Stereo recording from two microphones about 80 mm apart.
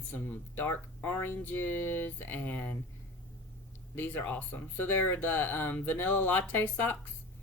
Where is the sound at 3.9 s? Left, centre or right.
Left.